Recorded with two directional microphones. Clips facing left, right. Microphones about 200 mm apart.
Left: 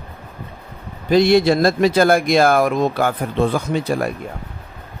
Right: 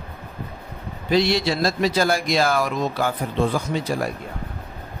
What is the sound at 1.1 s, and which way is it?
Speech, 50° left (ahead or behind).